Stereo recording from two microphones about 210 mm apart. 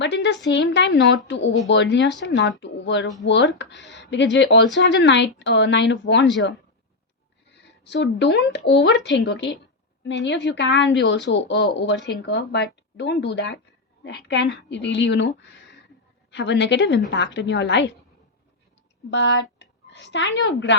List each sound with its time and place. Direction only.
0.0 s a woman's voice: 55° left (ahead or behind)
7.9 s speech: 60° left (ahead or behind)
19.1 s speech: 60° left (ahead or behind)